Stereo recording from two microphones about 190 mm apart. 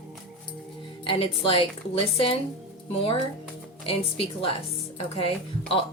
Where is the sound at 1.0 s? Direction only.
30° left (ahead or behind).